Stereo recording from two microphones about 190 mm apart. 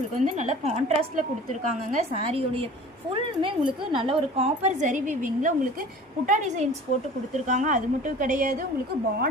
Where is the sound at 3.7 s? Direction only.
25° right (ahead or behind).